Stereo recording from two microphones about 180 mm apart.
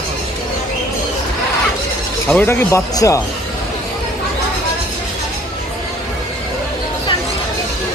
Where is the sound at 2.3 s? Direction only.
10° left (ahead or behind).